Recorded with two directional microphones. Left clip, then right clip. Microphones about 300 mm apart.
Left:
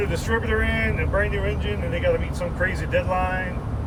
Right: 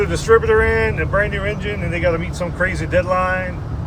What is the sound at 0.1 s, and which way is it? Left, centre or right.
Speech, centre.